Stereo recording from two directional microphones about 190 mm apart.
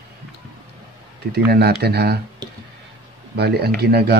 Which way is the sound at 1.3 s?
60° right (ahead or behind).